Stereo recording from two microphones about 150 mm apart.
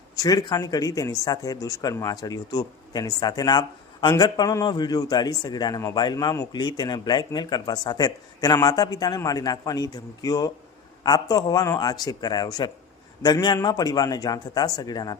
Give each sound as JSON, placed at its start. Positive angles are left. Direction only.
{"t": 0.2, "sound": "speech", "side_deg": 25}